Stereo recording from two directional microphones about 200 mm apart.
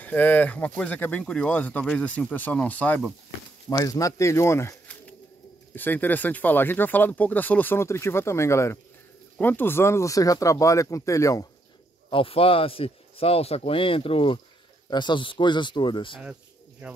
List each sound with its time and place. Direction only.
0.0 s speech: 10° left (ahead or behind)
3.6 s speech: 20° left (ahead or behind)
12.1 s speech: 25° left (ahead or behind)